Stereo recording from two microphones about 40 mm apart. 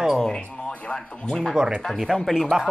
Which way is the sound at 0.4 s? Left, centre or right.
Left.